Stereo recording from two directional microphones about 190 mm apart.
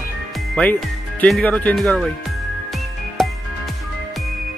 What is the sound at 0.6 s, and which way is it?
Speech, 5° left (ahead or behind).